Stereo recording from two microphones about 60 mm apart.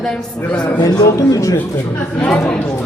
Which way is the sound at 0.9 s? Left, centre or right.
Left.